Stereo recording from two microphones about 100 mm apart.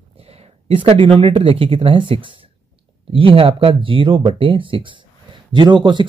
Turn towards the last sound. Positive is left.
turn(degrees=-50)  # may be behind; listen again after turning